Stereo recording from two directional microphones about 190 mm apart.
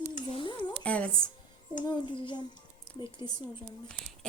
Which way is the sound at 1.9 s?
25° left (ahead or behind).